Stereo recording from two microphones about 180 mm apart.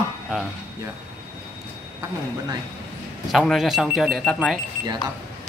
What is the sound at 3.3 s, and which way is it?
Speech, centre (ahead or behind).